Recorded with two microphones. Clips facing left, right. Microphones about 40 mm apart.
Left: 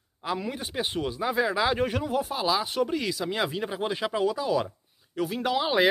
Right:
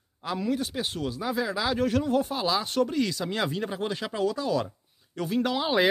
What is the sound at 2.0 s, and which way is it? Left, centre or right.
Speech, centre.